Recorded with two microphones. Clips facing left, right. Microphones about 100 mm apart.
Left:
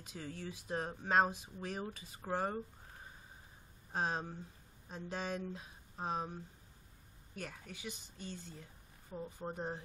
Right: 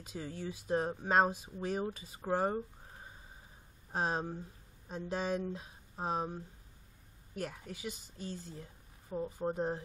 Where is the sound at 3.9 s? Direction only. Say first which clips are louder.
Right 3 dB; 25° right (ahead or behind).